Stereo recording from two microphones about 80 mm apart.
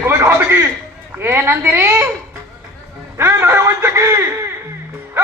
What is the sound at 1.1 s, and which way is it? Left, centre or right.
Speech, right.